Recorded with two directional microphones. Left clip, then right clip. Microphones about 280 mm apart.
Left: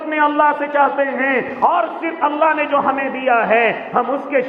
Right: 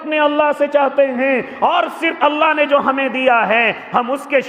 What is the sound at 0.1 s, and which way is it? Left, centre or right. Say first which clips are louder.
A man's voice: even; right.